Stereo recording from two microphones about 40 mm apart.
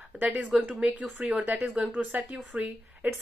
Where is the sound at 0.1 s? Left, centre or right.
Right.